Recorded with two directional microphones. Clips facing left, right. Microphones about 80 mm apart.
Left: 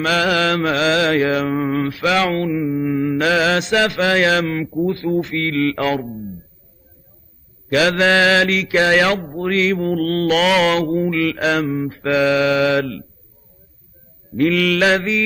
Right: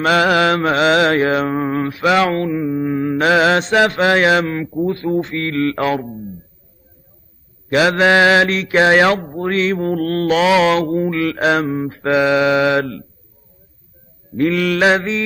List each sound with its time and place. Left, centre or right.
0.0 s mantra: right
7.7 s mantra: right
12.2 s mantra: right
14.3 s mantra: right